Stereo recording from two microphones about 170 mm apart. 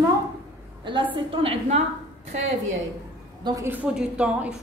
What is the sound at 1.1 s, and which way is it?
Speech, 30° right (ahead or behind).